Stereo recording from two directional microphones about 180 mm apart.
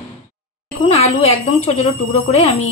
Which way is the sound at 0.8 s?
35° left (ahead or behind).